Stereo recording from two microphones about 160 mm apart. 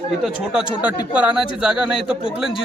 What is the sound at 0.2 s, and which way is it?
Speech, 5° right (ahead or behind).